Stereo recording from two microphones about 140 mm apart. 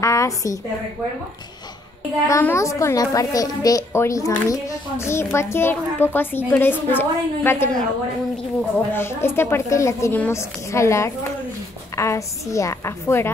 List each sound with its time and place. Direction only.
0.0 s a woman's voice: 20° left (ahead or behind)
2.2 s a woman's voice: 20° left (ahead or behind)